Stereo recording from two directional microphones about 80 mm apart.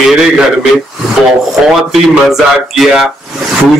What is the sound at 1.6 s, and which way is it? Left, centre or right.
Speech, centre.